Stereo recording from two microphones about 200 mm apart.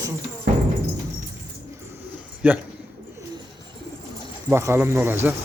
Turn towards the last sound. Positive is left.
turn(degrees=-10)  # may be behind; listen again after turning